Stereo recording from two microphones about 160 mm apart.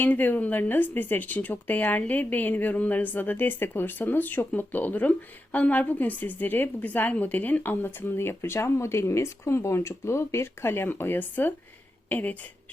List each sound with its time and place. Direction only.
0.0 s speech: 10° left (ahead or behind)